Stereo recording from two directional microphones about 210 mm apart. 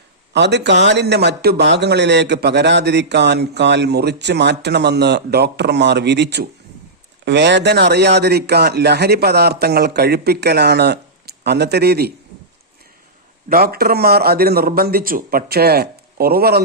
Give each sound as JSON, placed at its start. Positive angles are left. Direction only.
{"t": 0.3, "sound": "speech", "side_deg": -55}
{"t": 13.5, "sound": "speech", "side_deg": -45}